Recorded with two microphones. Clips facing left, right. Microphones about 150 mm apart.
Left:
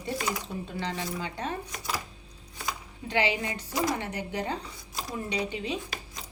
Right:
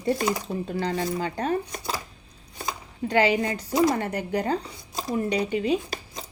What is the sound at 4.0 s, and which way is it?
Speech, 45° right (ahead or behind).